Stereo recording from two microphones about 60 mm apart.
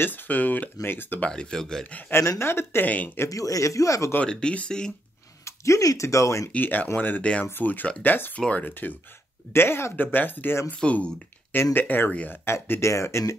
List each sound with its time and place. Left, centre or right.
0.0 s speech: left
1.2 s speech: centre
1.9 s speech: left
2.2 s speech: left
2.8 s speech: left
3.3 s speech: left
4.2 s speech: centre
5.4 s speech: left
6.5 s speech: left
9.5 s speech: left
9.9 s speech: left
12.8 s speech: left